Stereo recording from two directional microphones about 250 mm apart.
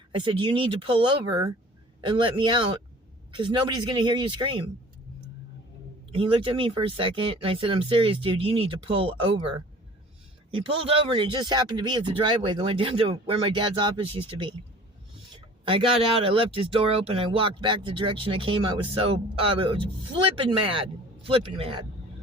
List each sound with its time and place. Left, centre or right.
0.1 s speech: centre
6.1 s speech: right
10.5 s speech: right
15.6 s speech: right